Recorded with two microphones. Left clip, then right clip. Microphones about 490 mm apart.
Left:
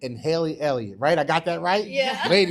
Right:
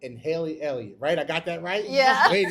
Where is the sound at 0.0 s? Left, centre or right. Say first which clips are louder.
Left 4 dB; left.